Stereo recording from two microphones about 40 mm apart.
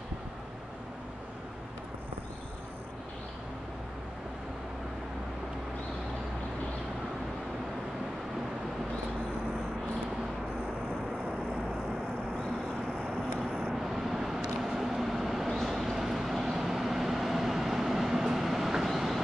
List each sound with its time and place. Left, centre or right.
13.4 s vehicle: centre
13.8 s vehicle: centre